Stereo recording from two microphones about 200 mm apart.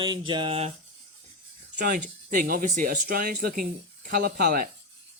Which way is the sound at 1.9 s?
40° right (ahead or behind).